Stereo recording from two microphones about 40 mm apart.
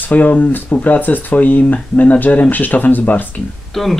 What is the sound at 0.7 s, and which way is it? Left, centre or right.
Speech, left.